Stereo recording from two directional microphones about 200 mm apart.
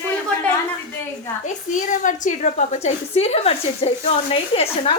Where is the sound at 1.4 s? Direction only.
40° left (ahead or behind).